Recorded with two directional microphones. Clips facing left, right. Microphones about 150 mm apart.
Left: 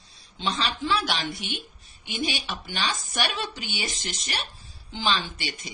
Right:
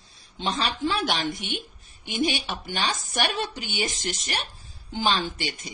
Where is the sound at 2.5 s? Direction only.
45° right (ahead or behind).